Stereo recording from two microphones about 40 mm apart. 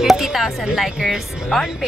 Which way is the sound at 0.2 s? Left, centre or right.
Centre.